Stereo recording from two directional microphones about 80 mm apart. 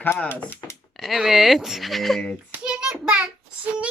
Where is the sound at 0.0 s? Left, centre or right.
Left.